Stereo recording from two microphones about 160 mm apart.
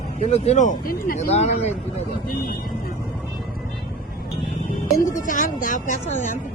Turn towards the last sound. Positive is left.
turn(degrees=50)  # may be behind; listen again after turning